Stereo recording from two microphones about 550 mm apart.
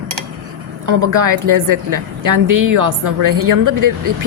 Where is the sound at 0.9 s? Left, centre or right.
Right.